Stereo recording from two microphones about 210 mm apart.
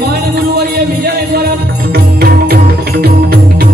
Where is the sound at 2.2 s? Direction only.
45° right (ahead or behind).